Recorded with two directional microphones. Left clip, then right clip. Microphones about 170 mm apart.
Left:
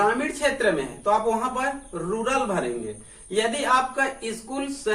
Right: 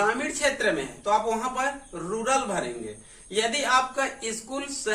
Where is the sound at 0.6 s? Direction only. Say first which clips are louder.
Left 3 dB; 20° right (ahead or behind).